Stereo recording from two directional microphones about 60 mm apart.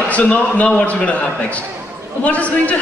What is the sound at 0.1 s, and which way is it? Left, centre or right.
A man's voice, left.